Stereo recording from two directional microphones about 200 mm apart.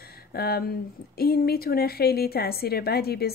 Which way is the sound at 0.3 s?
50° left (ahead or behind).